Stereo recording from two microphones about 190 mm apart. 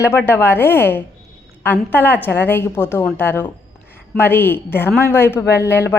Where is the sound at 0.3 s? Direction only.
10° left (ahead or behind).